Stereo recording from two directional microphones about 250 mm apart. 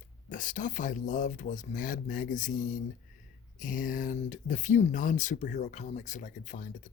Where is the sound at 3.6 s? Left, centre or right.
Left.